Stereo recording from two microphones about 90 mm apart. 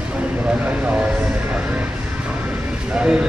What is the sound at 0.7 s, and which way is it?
Vehicle, 15° right (ahead or behind).